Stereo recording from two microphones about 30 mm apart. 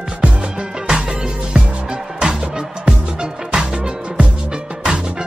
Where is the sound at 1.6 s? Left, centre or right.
Right.